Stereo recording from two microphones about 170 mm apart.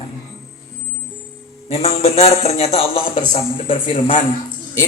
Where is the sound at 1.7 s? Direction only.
35° left (ahead or behind).